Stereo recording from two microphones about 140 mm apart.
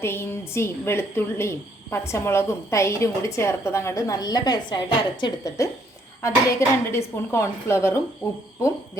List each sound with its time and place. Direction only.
0.0 s a woman's voice: 15° left (ahead or behind)